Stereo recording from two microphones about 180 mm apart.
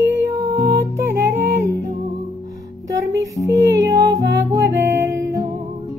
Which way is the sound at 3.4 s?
15° right (ahead or behind).